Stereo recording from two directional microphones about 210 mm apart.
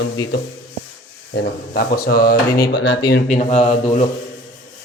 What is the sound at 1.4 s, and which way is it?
Speech, 45° left (ahead or behind).